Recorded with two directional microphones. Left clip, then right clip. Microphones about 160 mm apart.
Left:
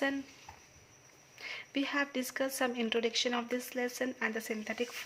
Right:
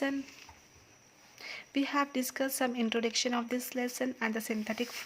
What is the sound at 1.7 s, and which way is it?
Speech, 30° right (ahead or behind).